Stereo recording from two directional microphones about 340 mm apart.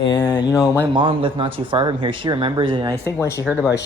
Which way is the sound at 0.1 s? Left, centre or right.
Centre.